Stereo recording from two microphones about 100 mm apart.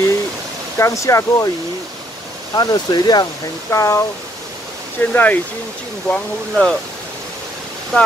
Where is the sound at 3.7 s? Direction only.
30° left (ahead or behind).